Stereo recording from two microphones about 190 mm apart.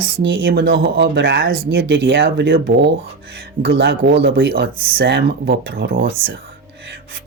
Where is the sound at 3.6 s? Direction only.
60° right (ahead or behind).